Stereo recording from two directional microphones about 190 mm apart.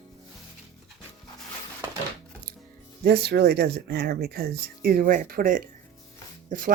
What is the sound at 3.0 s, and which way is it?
Speech, 55° right (ahead or behind).